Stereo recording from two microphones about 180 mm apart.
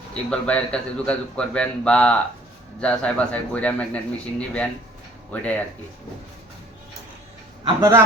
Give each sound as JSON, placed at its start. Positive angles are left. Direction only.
{"t": 0.1, "sound": "a man's voice", "side_deg": 5}
{"t": 7.6, "sound": "a man's voice", "side_deg": -20}